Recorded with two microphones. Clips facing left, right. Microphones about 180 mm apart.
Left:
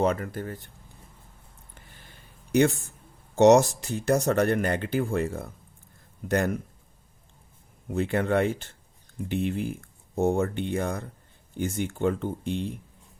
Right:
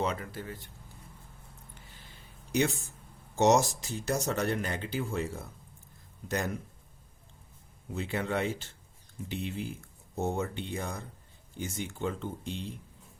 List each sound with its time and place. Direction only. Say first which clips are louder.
0.0 s speech: left 7 dB; 50° left (ahead or behind)
2.5 s speech: left 7 dB; 55° left (ahead or behind)
7.9 s speech: left 8 dB; 55° left (ahead or behind)